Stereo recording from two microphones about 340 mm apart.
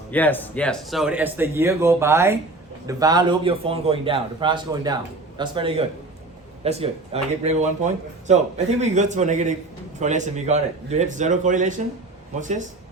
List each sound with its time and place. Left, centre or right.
0.1 s a man's voice: centre; by 12.6 s right